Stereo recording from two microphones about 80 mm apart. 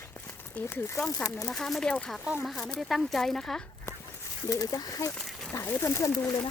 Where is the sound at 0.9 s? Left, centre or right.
Centre.